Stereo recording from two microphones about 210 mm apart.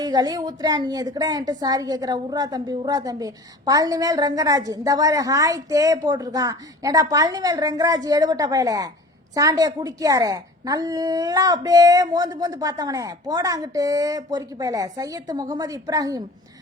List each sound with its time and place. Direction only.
0.0 s a woman's voice: 20° right (ahead or behind)